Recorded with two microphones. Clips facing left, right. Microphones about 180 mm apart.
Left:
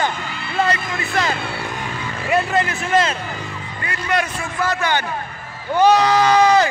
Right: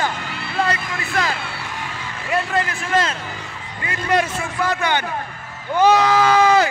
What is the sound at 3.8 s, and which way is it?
Speech, 25° right (ahead or behind).